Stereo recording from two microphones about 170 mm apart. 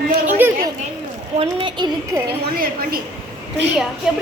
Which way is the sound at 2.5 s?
60° right (ahead or behind).